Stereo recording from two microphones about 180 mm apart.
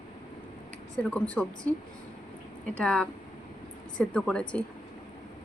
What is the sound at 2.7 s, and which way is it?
A woman's voice, 5° left (ahead or behind).